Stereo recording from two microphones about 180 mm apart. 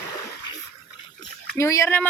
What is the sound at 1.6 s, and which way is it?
Speech, 15° left (ahead or behind).